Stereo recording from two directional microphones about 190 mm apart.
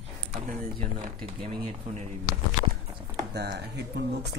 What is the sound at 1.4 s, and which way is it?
Speech, 30° right (ahead or behind).